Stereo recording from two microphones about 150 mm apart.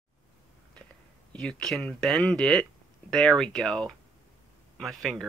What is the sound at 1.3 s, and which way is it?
Speech, 5° left (ahead or behind).